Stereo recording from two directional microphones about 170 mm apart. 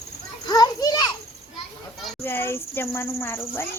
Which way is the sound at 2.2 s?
15° left (ahead or behind).